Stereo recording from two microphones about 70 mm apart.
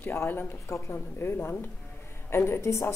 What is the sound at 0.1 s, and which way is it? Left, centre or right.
A woman's voice, left.